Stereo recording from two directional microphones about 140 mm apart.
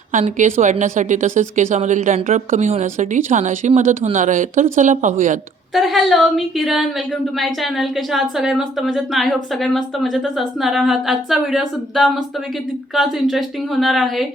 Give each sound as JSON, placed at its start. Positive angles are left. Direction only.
{"t": 0.1, "sound": "a woman's voice", "side_deg": -65}
{"t": 5.7, "sound": "a woman's voice", "side_deg": 0}